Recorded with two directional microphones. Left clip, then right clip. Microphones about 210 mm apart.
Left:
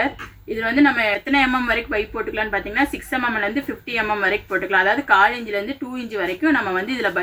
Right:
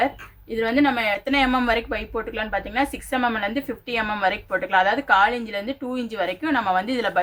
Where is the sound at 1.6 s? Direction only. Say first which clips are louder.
Left 2 dB; 55° right (ahead or behind).